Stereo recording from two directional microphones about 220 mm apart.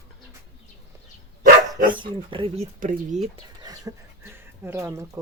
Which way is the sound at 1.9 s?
20° right (ahead or behind).